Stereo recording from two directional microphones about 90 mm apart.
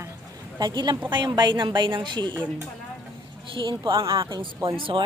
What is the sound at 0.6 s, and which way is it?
A woman's voice, 55° right (ahead or behind).